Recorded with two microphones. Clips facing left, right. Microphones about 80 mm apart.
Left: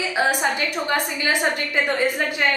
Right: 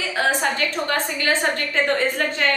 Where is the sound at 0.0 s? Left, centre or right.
Centre.